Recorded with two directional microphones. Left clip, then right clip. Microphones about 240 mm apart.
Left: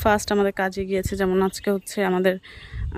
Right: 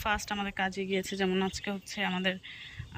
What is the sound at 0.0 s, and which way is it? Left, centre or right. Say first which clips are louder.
Speech: left 12 dB; left.